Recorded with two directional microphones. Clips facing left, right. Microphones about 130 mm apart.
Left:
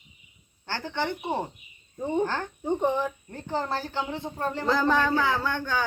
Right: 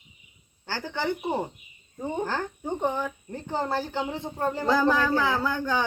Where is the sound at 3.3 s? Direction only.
15° right (ahead or behind).